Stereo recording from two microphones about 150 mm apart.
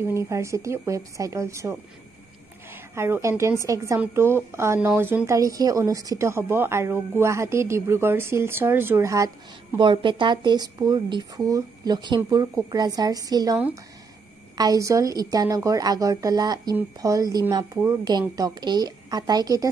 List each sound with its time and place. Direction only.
0.1 s a woman's voice: 20° right (ahead or behind)
14.6 s speech: 20° right (ahead or behind)